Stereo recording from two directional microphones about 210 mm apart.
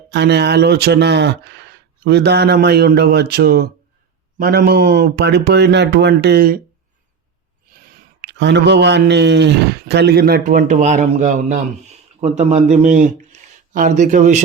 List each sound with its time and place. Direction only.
0.1 s speech: 55° right (ahead or behind)
8.2 s a man's voice: 55° right (ahead or behind); by 14.4 s 35° right (ahead or behind)